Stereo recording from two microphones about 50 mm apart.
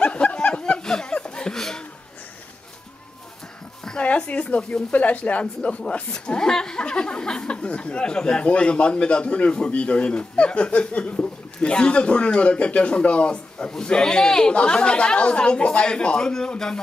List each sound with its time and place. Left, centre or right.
0.0 s chuckle: left
4.0 s speech: left